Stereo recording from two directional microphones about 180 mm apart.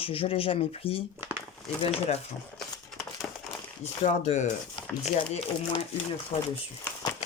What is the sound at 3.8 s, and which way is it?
Speech, 40° left (ahead or behind).